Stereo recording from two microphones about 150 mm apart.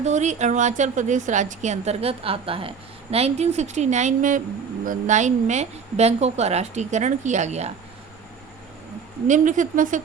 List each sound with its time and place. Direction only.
0.0 s a woman's voice: 50° right (ahead or behind)
9.2 s speech: 55° right (ahead or behind)